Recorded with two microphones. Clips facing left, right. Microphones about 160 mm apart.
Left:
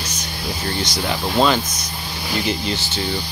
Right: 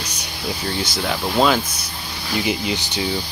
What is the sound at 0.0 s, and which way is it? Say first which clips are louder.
Music: left 2 dB; 10° right (ahead or behind).